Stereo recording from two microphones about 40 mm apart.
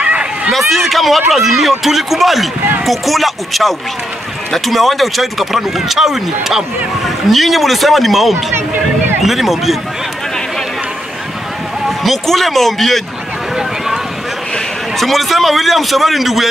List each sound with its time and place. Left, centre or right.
0.0 s a sound: right
0.5 s speech: centre
12.0 s speech: centre
15.0 s speech: centre